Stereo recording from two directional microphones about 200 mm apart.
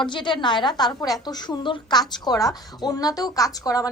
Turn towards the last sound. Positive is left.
turn(degrees=20)  # may be behind; listen again after turning